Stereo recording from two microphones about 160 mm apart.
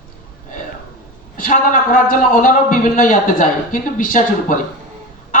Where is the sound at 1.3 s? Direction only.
60° left (ahead or behind).